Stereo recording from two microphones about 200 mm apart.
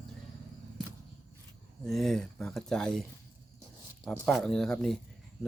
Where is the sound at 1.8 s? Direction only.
Centre (ahead or behind).